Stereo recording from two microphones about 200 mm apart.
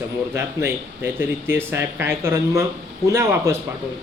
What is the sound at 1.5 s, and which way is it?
A man's voice, 10° right (ahead or behind).